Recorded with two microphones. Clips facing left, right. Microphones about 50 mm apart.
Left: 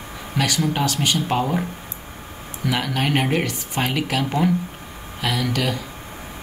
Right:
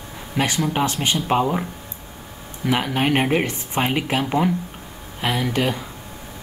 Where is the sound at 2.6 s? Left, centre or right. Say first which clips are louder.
Right 2 dB; right.